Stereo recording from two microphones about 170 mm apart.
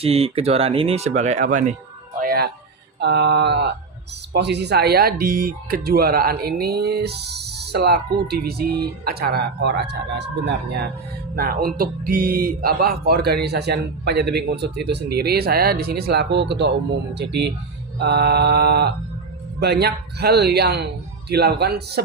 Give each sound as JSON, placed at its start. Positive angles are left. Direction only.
{"t": 0.0, "sound": "speech", "side_deg": -35}
{"t": 2.2, "sound": "a sound", "side_deg": -65}
{"t": 3.0, "sound": "speech", "side_deg": -85}
{"t": 11.3, "sound": "speech", "side_deg": -60}
{"t": 17.2, "sound": "speech", "side_deg": -80}